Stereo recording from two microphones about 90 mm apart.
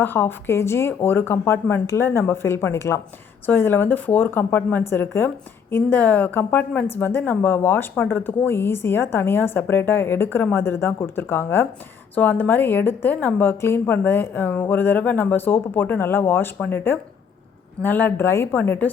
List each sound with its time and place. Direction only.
0.0 s a woman's voice: 25° left (ahead or behind)